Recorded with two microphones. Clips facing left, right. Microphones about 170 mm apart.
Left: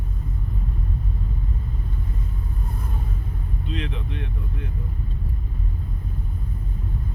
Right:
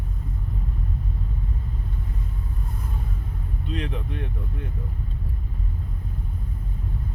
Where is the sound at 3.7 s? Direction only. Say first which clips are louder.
Right 1 dB; 45° right (ahead or behind).